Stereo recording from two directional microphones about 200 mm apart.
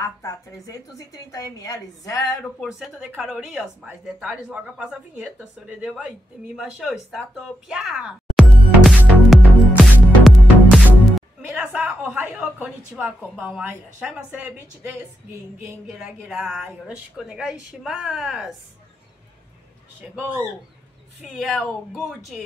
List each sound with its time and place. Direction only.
0.0 s a woman's voice: 15° left (ahead or behind)
2.6 s a woman's voice: centre (ahead or behind)
20.0 s a man's voice: 10° right (ahead or behind)